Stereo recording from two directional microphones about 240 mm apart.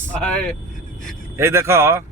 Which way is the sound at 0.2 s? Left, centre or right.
Centre.